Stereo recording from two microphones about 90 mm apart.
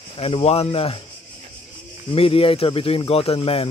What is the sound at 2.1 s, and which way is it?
Speech, 90° left.